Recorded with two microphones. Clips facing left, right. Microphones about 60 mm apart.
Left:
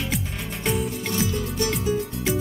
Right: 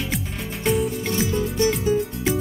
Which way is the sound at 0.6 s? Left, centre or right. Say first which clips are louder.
Right 4 dB; centre.